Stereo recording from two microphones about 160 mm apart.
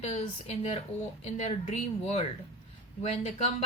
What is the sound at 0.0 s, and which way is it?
Speech, 40° left (ahead or behind).